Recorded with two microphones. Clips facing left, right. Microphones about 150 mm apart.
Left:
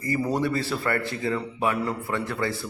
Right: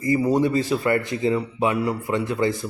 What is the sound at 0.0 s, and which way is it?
A man's voice, 20° right (ahead or behind).